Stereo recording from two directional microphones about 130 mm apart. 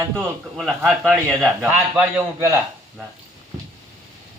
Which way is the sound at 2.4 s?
25° right (ahead or behind).